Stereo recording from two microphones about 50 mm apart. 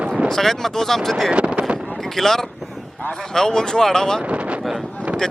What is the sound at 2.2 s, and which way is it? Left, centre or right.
Speech, centre.